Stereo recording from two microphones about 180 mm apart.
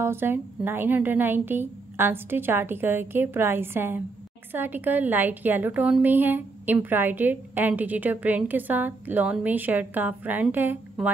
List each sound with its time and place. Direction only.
0.0 s a woman's voice: 10° right (ahead or behind)